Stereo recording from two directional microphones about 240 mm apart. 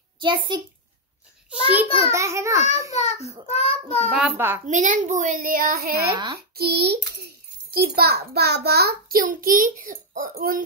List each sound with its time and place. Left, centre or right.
0.2 s a child's voice: centre
1.9 s a child's voice: left
2.1 s a child's voice: centre
2.9 s a child's voice: left
4.1 s a child's voice: centre
4.6 s a child's voice: right
6.1 s a child's voice: centre
6.5 s a child's voice: right